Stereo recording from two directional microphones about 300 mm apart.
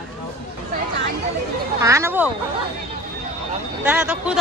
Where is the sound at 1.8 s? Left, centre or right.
Centre.